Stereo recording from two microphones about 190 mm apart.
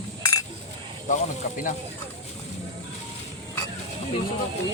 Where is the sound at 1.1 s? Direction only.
40° left (ahead or behind).